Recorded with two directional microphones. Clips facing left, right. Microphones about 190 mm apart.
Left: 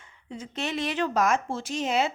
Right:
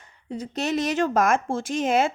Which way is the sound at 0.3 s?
40° right (ahead or behind).